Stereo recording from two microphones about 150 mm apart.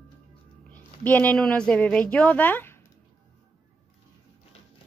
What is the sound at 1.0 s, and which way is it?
Speech, 10° left (ahead or behind).